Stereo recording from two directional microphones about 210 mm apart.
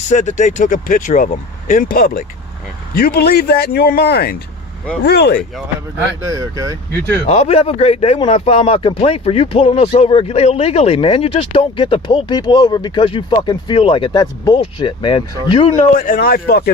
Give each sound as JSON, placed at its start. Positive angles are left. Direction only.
{"t": 0.1, "sound": "a man's voice", "side_deg": 35}
{"t": 6.2, "sound": "speech", "side_deg": -15}
{"t": 7.3, "sound": "speech", "side_deg": 30}
{"t": 16.0, "sound": "a man's voice", "side_deg": 40}